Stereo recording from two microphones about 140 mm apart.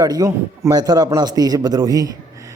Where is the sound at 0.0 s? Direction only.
25° right (ahead or behind).